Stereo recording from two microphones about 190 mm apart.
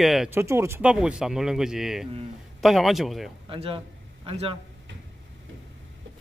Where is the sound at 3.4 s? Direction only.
30° right (ahead or behind).